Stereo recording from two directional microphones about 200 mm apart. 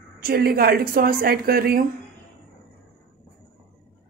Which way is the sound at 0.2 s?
50° right (ahead or behind).